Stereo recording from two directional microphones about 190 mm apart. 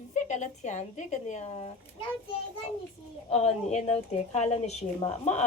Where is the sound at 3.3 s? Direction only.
35° left (ahead or behind).